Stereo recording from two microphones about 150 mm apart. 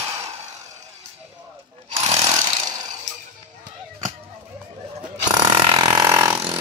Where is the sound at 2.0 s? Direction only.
40° right (ahead or behind).